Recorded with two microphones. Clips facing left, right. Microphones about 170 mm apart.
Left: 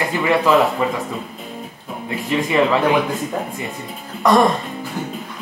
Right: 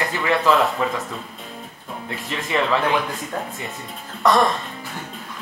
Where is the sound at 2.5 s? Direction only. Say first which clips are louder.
Left 4 dB; 15° left (ahead or behind).